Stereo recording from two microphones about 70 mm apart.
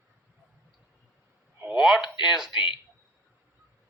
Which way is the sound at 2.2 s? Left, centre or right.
Centre.